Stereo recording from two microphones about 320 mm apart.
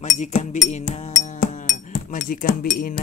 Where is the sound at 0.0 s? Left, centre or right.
Left.